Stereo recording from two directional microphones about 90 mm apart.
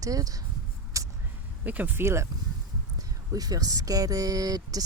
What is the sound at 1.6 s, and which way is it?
Speech, 15° right (ahead or behind).